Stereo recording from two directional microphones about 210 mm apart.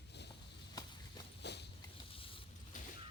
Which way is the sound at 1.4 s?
55° left (ahead or behind).